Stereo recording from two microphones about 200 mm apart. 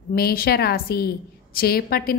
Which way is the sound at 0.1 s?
50° left (ahead or behind).